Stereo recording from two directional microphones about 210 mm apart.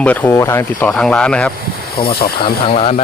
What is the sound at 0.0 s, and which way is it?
Speech, 5° left (ahead or behind).